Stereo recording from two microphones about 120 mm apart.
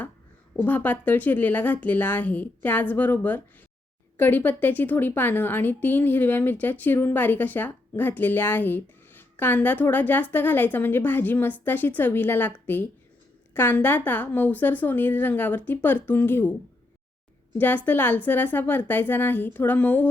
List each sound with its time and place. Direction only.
0.5 s a woman's voice: 15° left (ahead or behind)
17.6 s a woman's voice: 15° left (ahead or behind)